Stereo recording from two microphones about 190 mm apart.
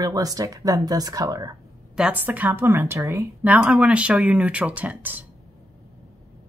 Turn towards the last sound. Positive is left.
turn(degrees=-10)  # may be behind; listen again after turning